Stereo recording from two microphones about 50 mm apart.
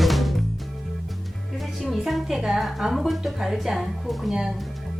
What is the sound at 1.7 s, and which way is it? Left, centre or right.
A woman's voice, centre.